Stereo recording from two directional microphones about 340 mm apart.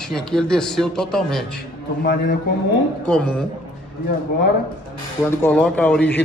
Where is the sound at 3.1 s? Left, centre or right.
Centre.